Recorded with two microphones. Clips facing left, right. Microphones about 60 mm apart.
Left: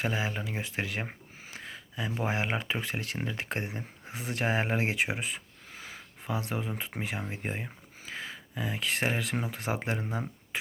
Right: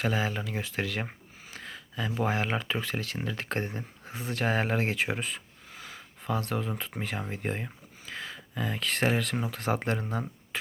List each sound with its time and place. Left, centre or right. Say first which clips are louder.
0.0 s speech: right 2 dB; centre
5.8 s a sound: right 3 dB; centre
7.0 s speech: right 2 dB; centre